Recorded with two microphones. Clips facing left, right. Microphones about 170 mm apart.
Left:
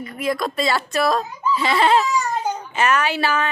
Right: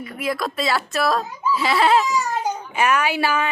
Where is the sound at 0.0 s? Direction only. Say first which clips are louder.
Left 2 dB; 5° right (ahead or behind).